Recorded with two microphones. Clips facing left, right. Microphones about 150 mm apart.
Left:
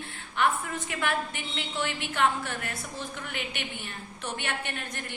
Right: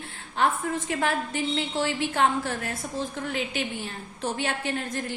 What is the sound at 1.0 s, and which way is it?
A woman's voice, 30° right (ahead or behind).